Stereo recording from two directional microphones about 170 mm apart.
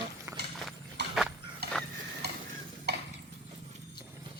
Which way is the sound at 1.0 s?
90° right.